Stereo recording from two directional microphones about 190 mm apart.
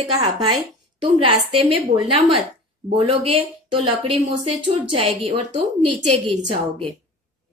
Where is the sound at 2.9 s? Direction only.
30° right (ahead or behind).